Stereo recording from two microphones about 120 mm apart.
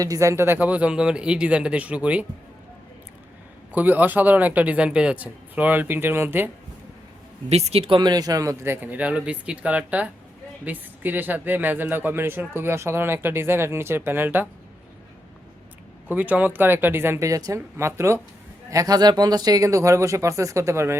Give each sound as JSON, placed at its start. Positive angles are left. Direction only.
{"t": 0.0, "sound": "speech", "side_deg": -25}
{"t": 3.7, "sound": "speech", "side_deg": -15}
{"t": 7.5, "sound": "speech", "side_deg": -60}
{"t": 16.0, "sound": "speech", "side_deg": -15}